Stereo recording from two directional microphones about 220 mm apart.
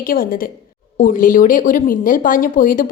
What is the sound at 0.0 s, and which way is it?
Speech, 40° left (ahead or behind).